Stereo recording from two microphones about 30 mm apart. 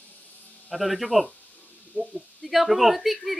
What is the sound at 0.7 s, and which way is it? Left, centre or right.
Speech, centre.